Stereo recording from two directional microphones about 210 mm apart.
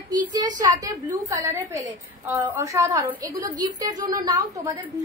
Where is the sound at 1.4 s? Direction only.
10° right (ahead or behind).